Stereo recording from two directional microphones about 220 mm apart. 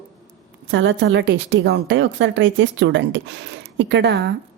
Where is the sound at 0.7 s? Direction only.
60° right (ahead or behind).